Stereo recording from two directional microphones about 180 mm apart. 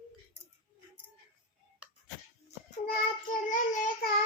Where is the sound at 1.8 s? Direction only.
5° right (ahead or behind).